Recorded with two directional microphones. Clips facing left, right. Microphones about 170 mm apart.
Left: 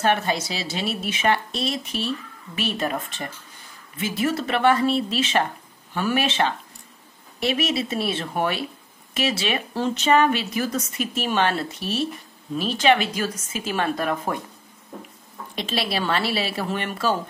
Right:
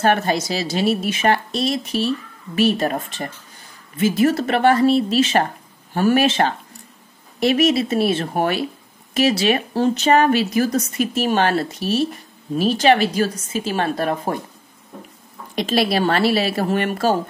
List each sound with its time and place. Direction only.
0.0 s a woman's voice: 40° right (ahead or behind)
15.5 s a woman's voice: 45° right (ahead or behind)